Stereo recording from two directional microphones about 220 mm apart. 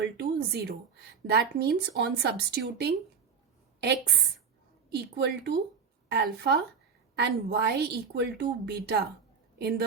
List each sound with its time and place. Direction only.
0.0 s a woman's voice: 45° right (ahead or behind)
4.9 s a woman's voice: 50° right (ahead or behind)